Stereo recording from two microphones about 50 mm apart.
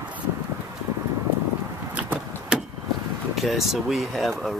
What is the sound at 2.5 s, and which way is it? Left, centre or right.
Vehicle, centre.